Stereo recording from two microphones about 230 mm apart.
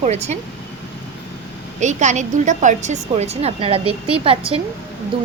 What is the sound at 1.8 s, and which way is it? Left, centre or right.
A woman's voice, right.